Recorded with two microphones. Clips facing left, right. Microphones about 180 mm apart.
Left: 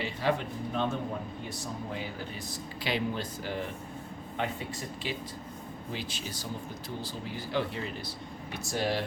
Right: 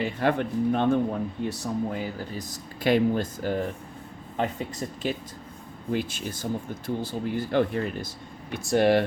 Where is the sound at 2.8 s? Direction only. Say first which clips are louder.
Right 10 dB; 50° right (ahead or behind).